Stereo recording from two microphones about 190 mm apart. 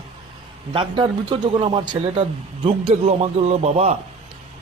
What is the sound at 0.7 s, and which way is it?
A man's voice, 25° right (ahead or behind).